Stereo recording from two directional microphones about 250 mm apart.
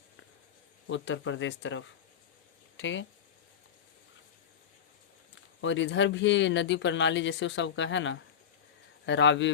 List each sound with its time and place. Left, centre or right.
0.9 s speech: left
5.3 s speech: left